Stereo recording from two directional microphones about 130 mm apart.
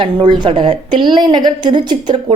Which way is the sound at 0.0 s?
40° right (ahead or behind).